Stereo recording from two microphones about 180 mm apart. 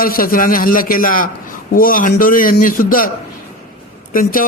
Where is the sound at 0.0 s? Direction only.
55° left (ahead or behind).